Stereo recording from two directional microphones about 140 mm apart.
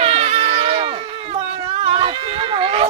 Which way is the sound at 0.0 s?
50° right (ahead or behind).